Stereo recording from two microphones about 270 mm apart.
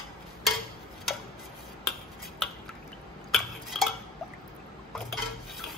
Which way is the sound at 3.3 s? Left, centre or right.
Centre.